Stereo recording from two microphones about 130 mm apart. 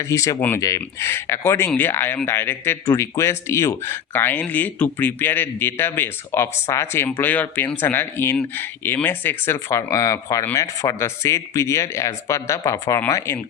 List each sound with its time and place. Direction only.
0.0 s speech: 25° left (ahead or behind)